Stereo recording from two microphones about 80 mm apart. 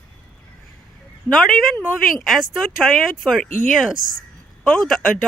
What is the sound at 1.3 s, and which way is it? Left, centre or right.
Speech, centre.